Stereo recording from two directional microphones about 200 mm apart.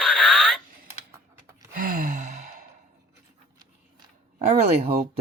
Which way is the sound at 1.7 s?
45° right (ahead or behind).